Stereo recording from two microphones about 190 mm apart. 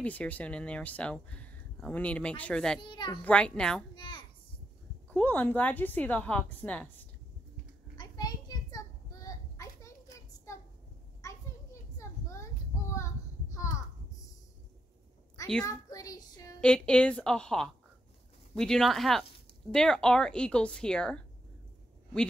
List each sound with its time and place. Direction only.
0.0 s speech: 10° left (ahead or behind)
2.8 s a child's voice: 25° left (ahead or behind)
3.3 s a woman's voice: 5° left (ahead or behind)
3.9 s a sound: 25° left (ahead or behind)
5.1 s speech: 10° left (ahead or behind)
8.0 s a sound: 20° left (ahead or behind)
11.2 s children playing: 15° left (ahead or behind)
12.0 s a sound: 15° left (ahead or behind)
12.9 s child singing: 15° left (ahead or behind)
15.6 s child singing: 20° left (ahead or behind)
16.6 s a woman's voice: 5° left (ahead or behind)